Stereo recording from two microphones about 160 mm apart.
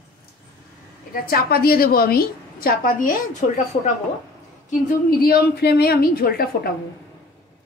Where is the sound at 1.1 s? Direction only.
70° left (ahead or behind).